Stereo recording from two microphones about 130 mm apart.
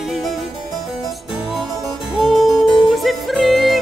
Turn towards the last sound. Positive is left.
turn(degrees=0)  # may be behind; listen again after turning